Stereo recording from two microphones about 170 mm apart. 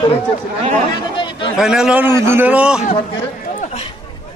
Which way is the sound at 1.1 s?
30° left (ahead or behind).